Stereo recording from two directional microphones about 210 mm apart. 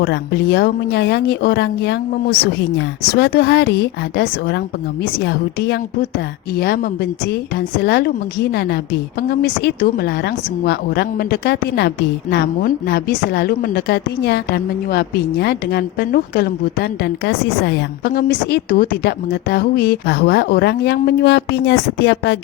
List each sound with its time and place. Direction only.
0.0 s a woman's voice: 50° left (ahead or behind)